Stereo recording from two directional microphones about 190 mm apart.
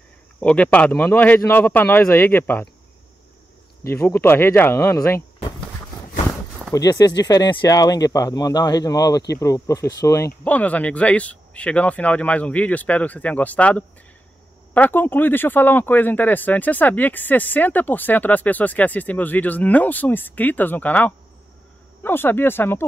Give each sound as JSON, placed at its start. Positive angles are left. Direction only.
{"t": 0.4, "sound": "speech", "side_deg": 10}
{"t": 3.9, "sound": "speech", "side_deg": 10}
{"t": 6.7, "sound": "speech", "side_deg": 20}